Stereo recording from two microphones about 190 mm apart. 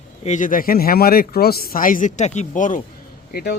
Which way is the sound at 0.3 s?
40° left (ahead or behind).